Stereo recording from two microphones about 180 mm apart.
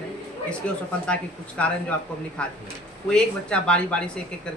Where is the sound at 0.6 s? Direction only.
5° left (ahead or behind).